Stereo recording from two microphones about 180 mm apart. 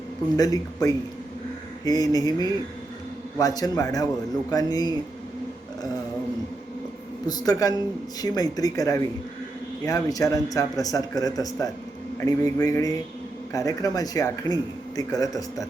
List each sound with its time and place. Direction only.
0.3 s a man's voice: 20° left (ahead or behind)
7.3 s a man's voice: 20° left (ahead or behind)
12.1 s mantra: 15° left (ahead or behind)
13.5 s a man's voice: 20° left (ahead or behind)